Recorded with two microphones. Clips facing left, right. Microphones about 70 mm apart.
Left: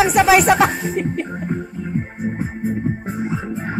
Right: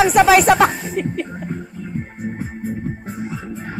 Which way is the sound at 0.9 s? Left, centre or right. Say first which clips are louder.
Left 1 dB; centre.